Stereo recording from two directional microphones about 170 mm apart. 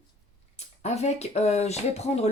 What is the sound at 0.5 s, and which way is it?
Speech, 40° left (ahead or behind).